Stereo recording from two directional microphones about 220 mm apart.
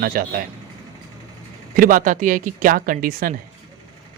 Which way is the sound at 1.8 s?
40° right (ahead or behind).